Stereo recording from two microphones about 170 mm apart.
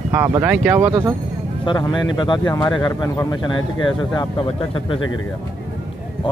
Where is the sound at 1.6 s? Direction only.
25° left (ahead or behind).